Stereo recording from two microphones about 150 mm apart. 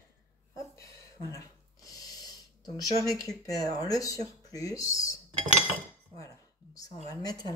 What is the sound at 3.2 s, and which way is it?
Speech, 25° left (ahead or behind).